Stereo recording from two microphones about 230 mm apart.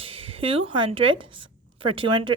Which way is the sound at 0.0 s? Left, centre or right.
Right.